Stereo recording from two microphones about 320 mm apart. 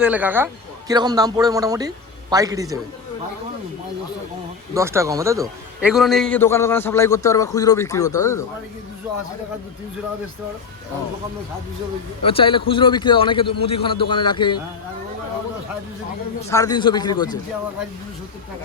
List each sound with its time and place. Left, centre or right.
0.0 s a man's voice: centre
4.7 s a man's voice: centre
12.2 s a man's voice: centre
16.5 s a man's voice: centre